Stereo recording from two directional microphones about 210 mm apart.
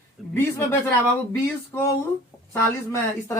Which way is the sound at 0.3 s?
10° left (ahead or behind).